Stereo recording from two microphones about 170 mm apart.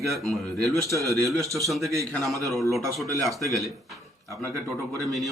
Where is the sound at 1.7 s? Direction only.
Centre (ahead or behind).